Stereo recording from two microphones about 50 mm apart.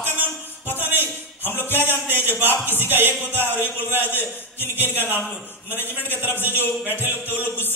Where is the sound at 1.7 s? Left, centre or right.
Right.